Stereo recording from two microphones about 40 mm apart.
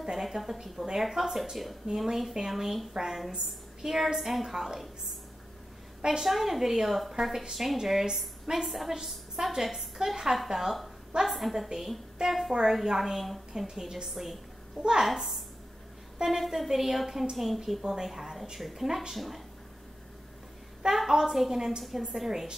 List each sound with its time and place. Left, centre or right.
0.0 s a woman's voice: centre
6.2 s a woman's voice: centre
16.3 s a woman's voice: centre
20.9 s a woman's voice: centre